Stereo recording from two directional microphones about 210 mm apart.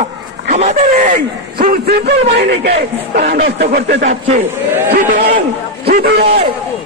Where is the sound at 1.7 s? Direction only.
50° right (ahead or behind).